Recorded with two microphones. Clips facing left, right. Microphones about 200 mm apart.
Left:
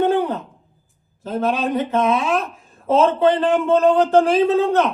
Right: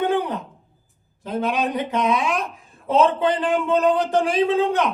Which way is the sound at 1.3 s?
15° right (ahead or behind).